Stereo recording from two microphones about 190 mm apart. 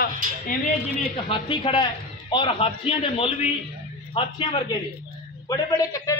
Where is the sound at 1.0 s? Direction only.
30° left (ahead or behind).